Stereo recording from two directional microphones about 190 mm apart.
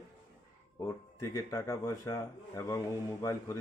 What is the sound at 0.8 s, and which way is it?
Speech, 20° left (ahead or behind).